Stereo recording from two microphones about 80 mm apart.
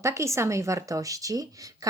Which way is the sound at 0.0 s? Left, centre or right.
Right.